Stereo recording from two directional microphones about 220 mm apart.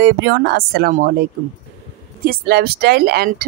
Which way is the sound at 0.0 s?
50° right (ahead or behind).